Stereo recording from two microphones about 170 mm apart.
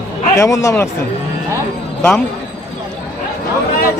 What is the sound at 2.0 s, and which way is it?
Speech, 10° left (ahead or behind).